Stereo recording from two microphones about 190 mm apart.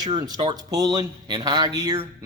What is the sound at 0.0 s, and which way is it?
Speech, 20° right (ahead or behind).